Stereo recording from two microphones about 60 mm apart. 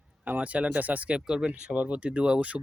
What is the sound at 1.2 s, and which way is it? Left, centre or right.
Speech, centre.